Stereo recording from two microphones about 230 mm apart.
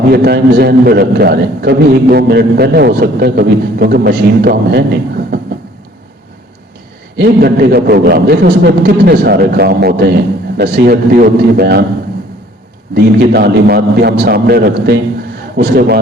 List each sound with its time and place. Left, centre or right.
0.1 s a man's voice: right
7.2 s a man's voice: right
12.9 s a man's voice: right